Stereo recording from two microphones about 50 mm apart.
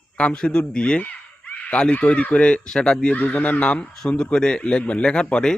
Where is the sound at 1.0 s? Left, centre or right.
Left.